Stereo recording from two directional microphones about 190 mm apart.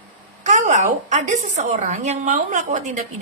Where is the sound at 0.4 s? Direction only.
35° right (ahead or behind).